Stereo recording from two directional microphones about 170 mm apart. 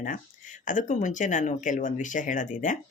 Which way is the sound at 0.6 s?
50° left (ahead or behind).